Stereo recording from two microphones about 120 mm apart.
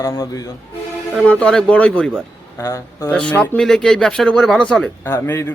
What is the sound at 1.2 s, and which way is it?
Speech, 10° left (ahead or behind).